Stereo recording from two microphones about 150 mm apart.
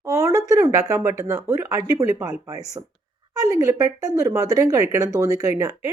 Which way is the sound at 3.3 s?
20° right (ahead or behind).